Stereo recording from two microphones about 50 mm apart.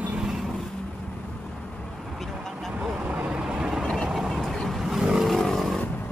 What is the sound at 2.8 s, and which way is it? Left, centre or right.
Vehicle, right.